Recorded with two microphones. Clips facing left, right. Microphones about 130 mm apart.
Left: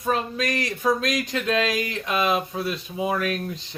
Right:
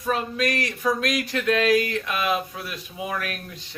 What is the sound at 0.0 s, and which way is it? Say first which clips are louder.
Speech: even; 25° left (ahead or behind).